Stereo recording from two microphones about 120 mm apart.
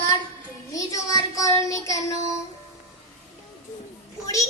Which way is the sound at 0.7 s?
25° left (ahead or behind).